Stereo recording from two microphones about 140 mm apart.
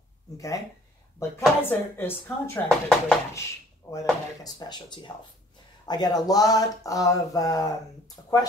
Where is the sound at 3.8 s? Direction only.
20° left (ahead or behind).